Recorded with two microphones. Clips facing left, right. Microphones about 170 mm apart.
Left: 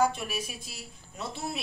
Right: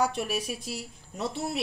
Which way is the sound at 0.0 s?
70° right (ahead or behind).